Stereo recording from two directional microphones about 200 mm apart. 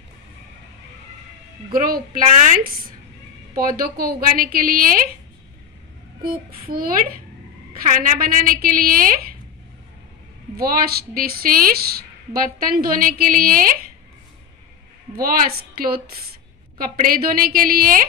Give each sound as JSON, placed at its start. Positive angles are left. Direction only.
{"t": 1.7, "sound": "a woman's voice", "side_deg": -45}
{"t": 6.2, "sound": "a woman's voice", "side_deg": -45}
{"t": 10.5, "sound": "a woman's voice", "side_deg": -50}
{"t": 16.7, "sound": "a woman's voice", "side_deg": -45}